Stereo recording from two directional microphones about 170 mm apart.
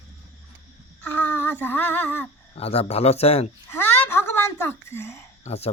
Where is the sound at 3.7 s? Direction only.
15° left (ahead or behind).